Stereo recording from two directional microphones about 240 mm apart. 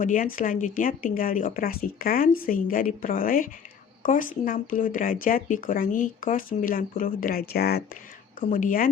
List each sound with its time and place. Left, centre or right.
0.0 s a woman's voice: left